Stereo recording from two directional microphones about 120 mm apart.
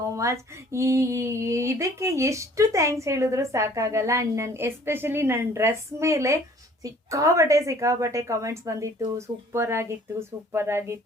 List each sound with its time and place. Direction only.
0.2 s speech: 25° right (ahead or behind)